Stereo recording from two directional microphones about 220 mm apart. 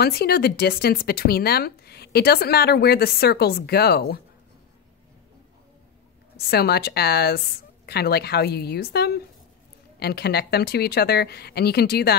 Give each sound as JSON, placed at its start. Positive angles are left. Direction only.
{"t": 0.0, "sound": "speech", "side_deg": 45}
{"t": 6.5, "sound": "speech", "side_deg": 45}